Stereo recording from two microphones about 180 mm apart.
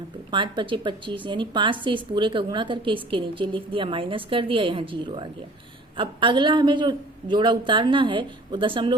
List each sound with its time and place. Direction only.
0.3 s a woman's voice: 25° right (ahead or behind)